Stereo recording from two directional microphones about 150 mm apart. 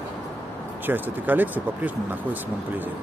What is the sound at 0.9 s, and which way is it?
Speech, 10° right (ahead or behind).